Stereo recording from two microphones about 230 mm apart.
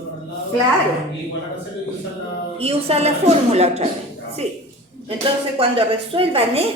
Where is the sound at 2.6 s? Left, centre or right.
Right.